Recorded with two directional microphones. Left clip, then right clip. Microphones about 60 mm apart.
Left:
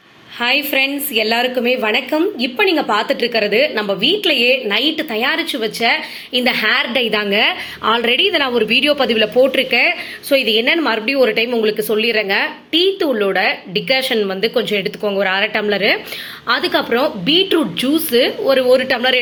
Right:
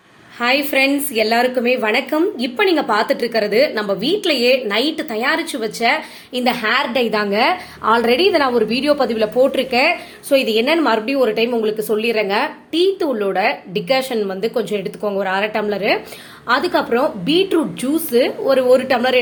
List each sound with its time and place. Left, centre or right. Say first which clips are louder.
0.3 s a woman's voice: even; right
5.1 s a woman's voice: left 1 dB; right
6.5 s a woman's voice: left 1 dB; centre